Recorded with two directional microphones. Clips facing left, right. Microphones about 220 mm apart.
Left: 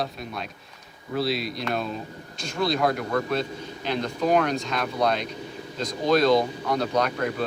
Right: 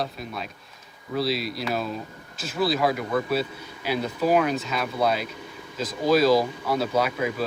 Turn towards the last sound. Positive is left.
turn(degrees=-5)  # may be behind; listen again after turning